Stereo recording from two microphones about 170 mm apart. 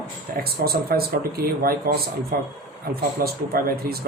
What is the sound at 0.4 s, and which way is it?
Speech, 65° right (ahead or behind).